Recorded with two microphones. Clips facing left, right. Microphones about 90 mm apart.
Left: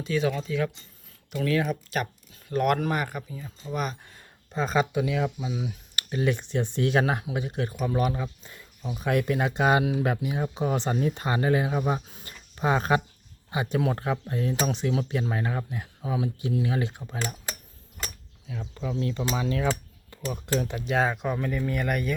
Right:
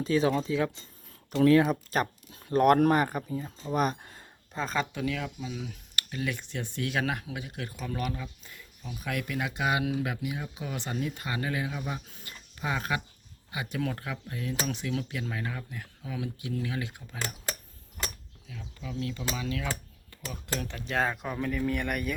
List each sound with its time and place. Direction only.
0.0 s speech: 35° right (ahead or behind)
4.5 s speech: 5° left (ahead or behind); by 5.5 s 25° left (ahead or behind)
5.5 s a sound: 10° left (ahead or behind)
6.1 s speech: 25° left (ahead or behind)
8.1 s speech: 35° left (ahead or behind)
12.2 s a sound: 35° left (ahead or behind)
13.5 s speech: 30° left (ahead or behind)
18.4 s speech: 40° left (ahead or behind)
20.3 s speech: 20° left (ahead or behind); by 22.1 s centre (ahead or behind)